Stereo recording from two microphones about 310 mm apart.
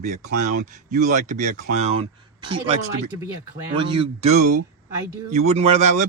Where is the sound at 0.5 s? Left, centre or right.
Right.